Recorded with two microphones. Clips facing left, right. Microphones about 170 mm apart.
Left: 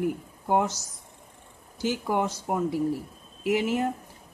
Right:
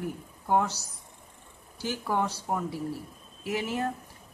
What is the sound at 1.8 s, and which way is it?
Speech, 15° left (ahead or behind).